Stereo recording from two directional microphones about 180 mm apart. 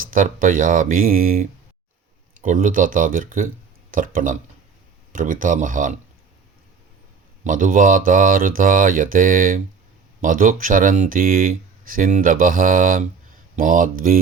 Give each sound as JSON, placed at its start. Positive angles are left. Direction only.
{"t": 0.1, "sound": "speech", "side_deg": -50}
{"t": 7.4, "sound": "speech", "side_deg": -45}